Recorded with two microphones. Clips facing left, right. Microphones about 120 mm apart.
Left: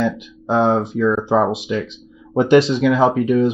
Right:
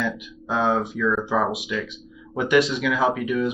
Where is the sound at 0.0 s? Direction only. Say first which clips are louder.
Left 7 dB; 35° left (ahead or behind).